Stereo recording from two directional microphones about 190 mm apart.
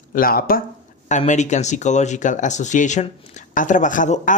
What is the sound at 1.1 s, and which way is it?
Speech, 40° left (ahead or behind).